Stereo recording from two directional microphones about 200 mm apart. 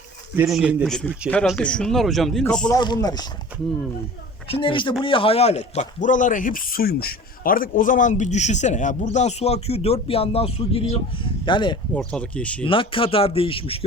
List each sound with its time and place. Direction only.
0.3 s speech: 5° right (ahead or behind)
2.6 s speech: 20° left (ahead or behind)
4.6 s speech: 25° left (ahead or behind)
11.9 s speech: 5° left (ahead or behind)
12.6 s speech: 25° left (ahead or behind)